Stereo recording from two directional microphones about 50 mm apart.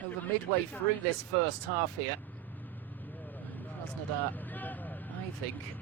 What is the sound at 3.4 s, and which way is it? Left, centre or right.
Vehicle, left.